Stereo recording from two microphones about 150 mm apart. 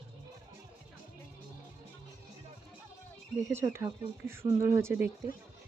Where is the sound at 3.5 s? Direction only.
15° right (ahead or behind).